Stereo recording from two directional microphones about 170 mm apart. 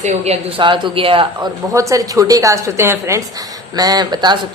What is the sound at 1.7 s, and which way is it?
A woman's voice, 20° right (ahead or behind).